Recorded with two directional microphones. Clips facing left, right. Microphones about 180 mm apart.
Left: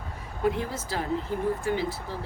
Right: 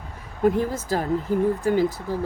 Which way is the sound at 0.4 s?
45° right (ahead or behind).